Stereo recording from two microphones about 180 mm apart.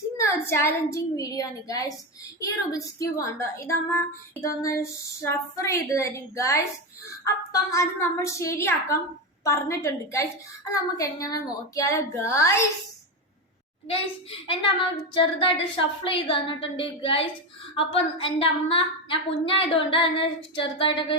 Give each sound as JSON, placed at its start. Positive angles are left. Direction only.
{"t": 0.2, "sound": "a woman's voice", "side_deg": 15}
{"t": 13.8, "sound": "a woman's voice", "side_deg": 30}